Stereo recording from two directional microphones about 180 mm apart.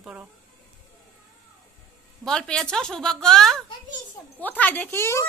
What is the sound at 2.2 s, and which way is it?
A woman's voice, 5° left (ahead or behind).